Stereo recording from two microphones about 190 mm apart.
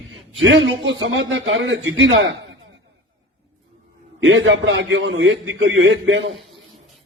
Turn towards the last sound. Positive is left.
turn(degrees=-85)